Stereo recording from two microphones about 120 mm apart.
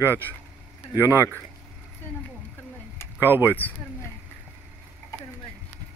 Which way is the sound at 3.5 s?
15° left (ahead or behind).